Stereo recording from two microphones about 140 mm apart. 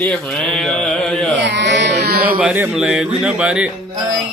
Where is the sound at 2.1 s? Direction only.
90° right.